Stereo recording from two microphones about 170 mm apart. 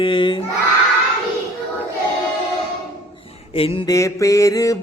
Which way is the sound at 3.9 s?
20° left (ahead or behind).